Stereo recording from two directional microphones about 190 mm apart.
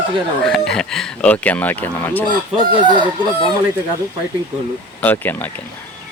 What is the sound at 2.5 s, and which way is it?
Fowl, 25° right (ahead or behind).